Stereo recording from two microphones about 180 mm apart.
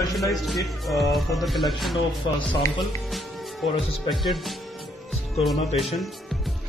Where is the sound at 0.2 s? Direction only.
Centre (ahead or behind).